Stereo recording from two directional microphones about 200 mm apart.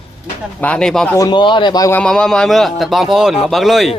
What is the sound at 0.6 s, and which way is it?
Speech, 5° left (ahead or behind).